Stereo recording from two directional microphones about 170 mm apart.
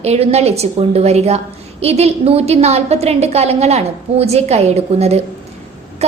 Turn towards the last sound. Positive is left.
turn(degrees=-40)  # may be behind; listen again after turning